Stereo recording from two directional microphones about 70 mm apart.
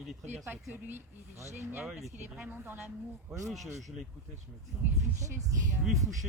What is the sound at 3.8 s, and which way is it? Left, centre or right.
Speech, centre.